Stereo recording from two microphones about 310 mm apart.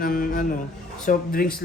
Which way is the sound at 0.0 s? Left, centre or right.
Left.